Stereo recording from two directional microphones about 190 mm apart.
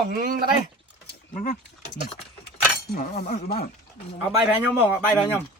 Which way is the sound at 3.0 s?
40° left (ahead or behind).